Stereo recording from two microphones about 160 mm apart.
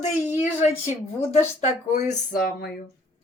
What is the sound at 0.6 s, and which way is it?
A woman's voice, 45° left (ahead or behind).